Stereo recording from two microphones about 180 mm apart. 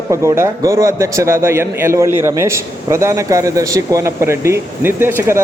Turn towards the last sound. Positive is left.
turn(degrees=-15)  # may be behind; listen again after turning